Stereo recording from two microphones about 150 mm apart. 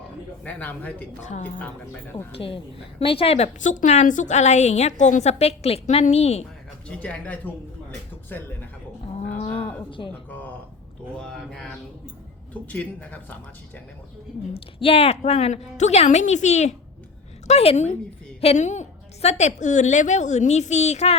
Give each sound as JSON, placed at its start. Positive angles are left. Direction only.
{"t": 0.4, "sound": "a man's voice", "side_deg": 10}
{"t": 1.2, "sound": "a woman's voice", "side_deg": 50}
{"t": 2.3, "sound": "a woman's voice", "side_deg": 35}
{"t": 6.8, "sound": "a man's voice", "side_deg": 5}
{"t": 9.3, "sound": "a woman's voice", "side_deg": 45}
{"t": 10.0, "sound": "a woman's voice", "side_deg": 35}
{"t": 11.2, "sound": "speech", "side_deg": 0}
{"t": 12.6, "sound": "a man's voice", "side_deg": 10}
{"t": 14.8, "sound": "a woman's voice", "side_deg": 40}